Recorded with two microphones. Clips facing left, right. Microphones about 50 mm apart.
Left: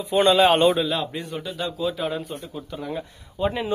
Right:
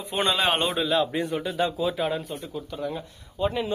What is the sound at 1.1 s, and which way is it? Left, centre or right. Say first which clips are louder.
A man's voice: right 4 dB; centre.